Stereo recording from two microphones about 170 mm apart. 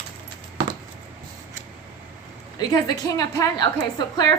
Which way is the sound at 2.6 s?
25° left (ahead or behind).